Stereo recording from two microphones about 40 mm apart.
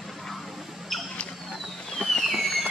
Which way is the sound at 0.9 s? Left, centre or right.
Centre.